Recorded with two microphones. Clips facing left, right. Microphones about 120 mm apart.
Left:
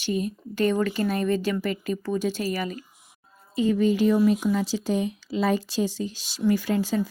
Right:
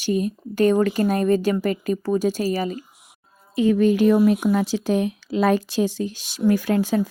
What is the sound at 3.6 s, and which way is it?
Speech, 60° right (ahead or behind).